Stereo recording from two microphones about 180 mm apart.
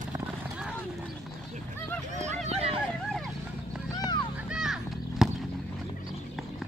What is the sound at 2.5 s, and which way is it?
Hubbub, 35° right (ahead or behind).